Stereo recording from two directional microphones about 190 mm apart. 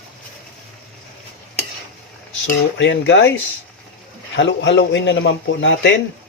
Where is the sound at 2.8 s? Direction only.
80° left.